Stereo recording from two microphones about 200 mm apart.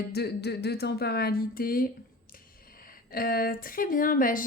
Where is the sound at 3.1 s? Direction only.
50° left (ahead or behind).